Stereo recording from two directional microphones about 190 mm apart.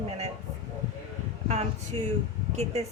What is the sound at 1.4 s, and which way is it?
Speech, 35° right (ahead or behind).